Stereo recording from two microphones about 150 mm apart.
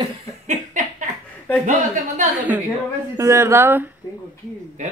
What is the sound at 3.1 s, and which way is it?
Speech, 20° right (ahead or behind).